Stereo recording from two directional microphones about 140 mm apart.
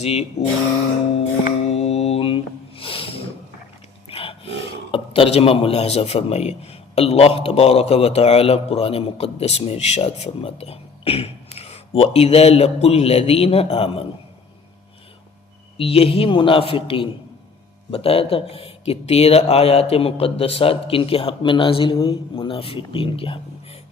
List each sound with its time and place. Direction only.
0.0 s speech: 45° left (ahead or behind)
1.6 s music: 45° left (ahead or behind)
4.1 s speech: 40° left (ahead or behind)
15.8 s speech: 45° left (ahead or behind)